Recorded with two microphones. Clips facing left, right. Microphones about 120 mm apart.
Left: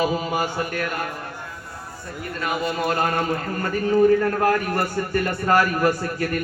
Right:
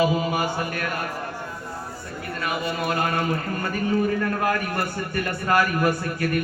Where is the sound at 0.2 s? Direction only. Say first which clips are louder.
Even; 30° left (ahead or behind).